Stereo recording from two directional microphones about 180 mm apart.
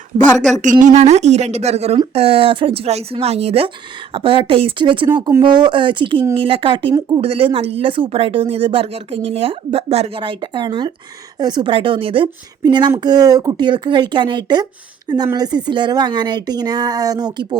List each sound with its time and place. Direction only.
0.5 s a woman's voice: 45° right (ahead or behind); by 17.6 s 25° right (ahead or behind)